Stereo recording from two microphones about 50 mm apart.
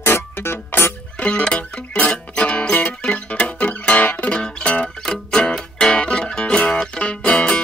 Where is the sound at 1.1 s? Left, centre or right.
Left.